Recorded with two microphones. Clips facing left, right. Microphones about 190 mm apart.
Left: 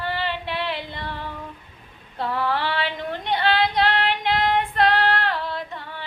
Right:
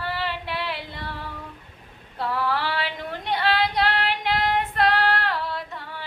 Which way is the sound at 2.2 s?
20° left (ahead or behind).